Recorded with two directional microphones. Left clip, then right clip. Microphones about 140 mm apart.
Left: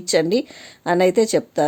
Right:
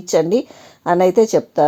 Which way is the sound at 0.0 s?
5° right (ahead or behind).